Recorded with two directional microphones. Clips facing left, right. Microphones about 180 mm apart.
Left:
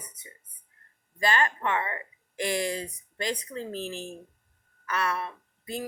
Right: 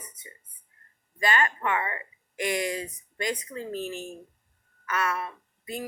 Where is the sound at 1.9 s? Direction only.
10° right (ahead or behind).